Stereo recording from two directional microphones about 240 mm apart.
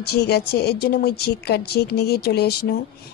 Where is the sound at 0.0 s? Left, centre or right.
Left.